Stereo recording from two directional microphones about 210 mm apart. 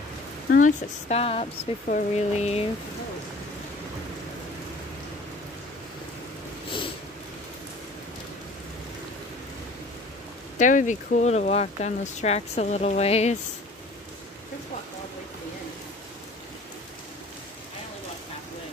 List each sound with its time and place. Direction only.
0.5 s speech: 40° left (ahead or behind)
10.6 s speech: 35° left (ahead or behind)